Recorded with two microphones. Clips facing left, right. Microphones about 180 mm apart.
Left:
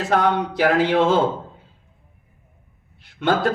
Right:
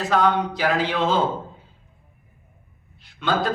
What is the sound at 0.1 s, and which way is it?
Speech, 55° left (ahead or behind).